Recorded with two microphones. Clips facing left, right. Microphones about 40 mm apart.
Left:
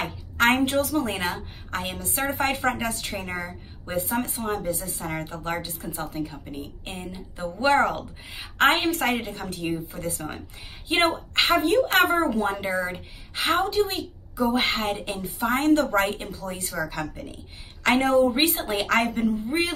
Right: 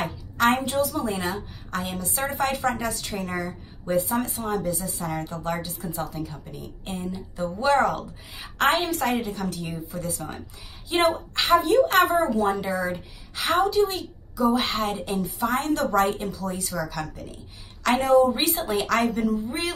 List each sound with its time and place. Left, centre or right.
0.0 s a woman's voice: left
1.7 s a woman's voice: left
3.9 s a woman's voice: left
8.6 s a woman's voice: left